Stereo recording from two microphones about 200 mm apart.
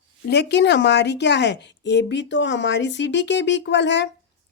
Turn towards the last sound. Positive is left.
turn(degrees=60)  # may be behind; listen again after turning